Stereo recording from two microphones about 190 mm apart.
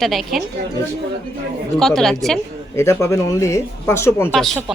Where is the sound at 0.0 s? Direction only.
Centre (ahead or behind).